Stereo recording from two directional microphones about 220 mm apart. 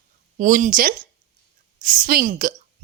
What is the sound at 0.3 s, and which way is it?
A woman's voice, 35° right (ahead or behind).